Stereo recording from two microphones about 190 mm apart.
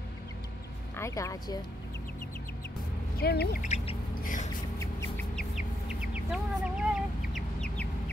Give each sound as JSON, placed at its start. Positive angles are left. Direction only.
{"t": 0.9, "sound": "a woman's voice", "side_deg": 15}
{"t": 3.2, "sound": "speech", "side_deg": 55}
{"t": 3.6, "sound": "bird", "side_deg": 35}
{"t": 4.7, "sound": "a sound", "side_deg": 15}
{"t": 5.9, "sound": "chicken", "side_deg": -5}